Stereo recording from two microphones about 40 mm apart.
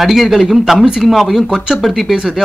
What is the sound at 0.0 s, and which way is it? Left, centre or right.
Speech, centre.